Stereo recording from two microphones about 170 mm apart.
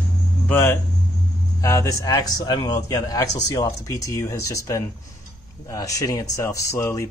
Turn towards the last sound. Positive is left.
turn(degrees=15)  # may be behind; listen again after turning